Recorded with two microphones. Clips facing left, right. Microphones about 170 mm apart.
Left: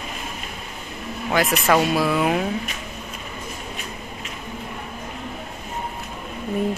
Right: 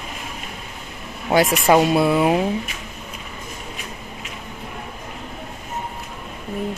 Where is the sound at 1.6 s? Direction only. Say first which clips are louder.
Right 3 dB; 20° right (ahead or behind).